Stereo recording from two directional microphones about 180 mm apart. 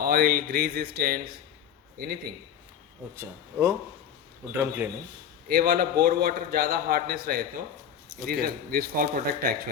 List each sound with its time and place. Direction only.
0.0 s a man's voice: 55° right (ahead or behind)
3.2 s a man's voice: 15° right (ahead or behind)
5.5 s a man's voice: 55° right (ahead or behind)